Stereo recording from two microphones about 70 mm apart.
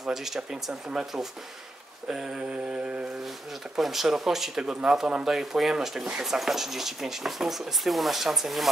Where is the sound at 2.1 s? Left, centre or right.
Centre.